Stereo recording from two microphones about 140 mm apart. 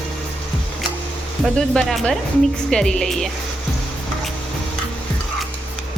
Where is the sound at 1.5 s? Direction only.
5° left (ahead or behind).